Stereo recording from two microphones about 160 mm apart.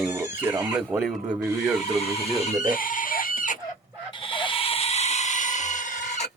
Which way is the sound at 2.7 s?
60° left (ahead or behind).